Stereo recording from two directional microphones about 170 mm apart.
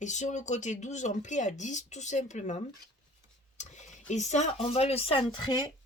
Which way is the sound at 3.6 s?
45° left (ahead or behind).